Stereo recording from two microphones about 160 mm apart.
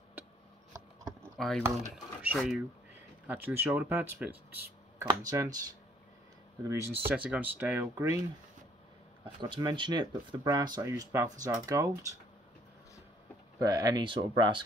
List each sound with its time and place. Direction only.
0.7 s a sound: 15° right (ahead or behind)
2.3 s speech: centre (ahead or behind)
3.3 s speech: 10° right (ahead or behind)
5.0 s speech: 20° right (ahead or behind)
6.6 s speech: 15° right (ahead or behind)
9.2 s speech: 30° right (ahead or behind)
13.6 s speech: 20° right (ahead or behind)